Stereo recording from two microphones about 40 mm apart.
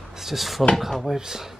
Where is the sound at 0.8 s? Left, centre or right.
Centre.